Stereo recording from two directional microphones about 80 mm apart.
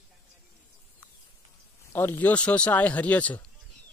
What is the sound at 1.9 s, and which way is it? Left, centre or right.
Speech, left.